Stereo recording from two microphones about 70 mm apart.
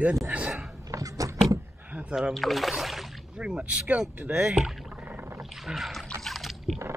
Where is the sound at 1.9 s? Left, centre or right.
Right.